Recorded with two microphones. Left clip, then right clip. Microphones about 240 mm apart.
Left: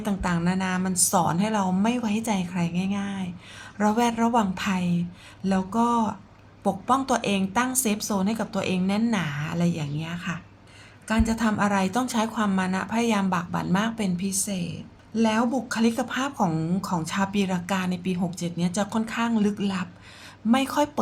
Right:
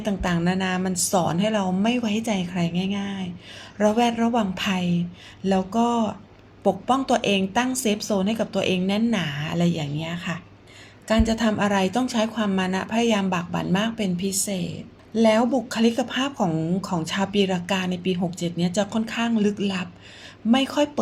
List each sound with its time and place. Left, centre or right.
0.0 s a woman's voice: centre